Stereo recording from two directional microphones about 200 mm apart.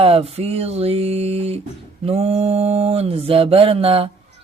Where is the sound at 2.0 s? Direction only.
30° right (ahead or behind).